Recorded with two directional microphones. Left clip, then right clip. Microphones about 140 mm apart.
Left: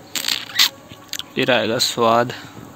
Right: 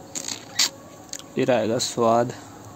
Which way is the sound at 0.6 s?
15° right (ahead or behind).